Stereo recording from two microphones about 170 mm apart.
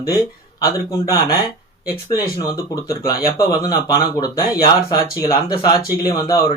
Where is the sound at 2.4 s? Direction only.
20° left (ahead or behind).